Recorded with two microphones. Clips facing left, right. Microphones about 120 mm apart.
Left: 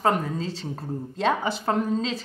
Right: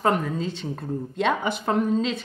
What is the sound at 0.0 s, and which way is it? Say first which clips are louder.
A woman's voice: right 1 dB; 35° left (ahead or behind).